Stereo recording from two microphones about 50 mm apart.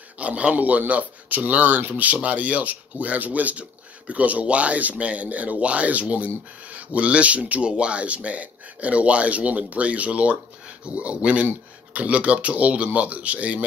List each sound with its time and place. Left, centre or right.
0.2 s speech: right